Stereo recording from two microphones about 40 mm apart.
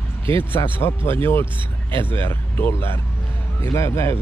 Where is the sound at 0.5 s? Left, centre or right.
Left.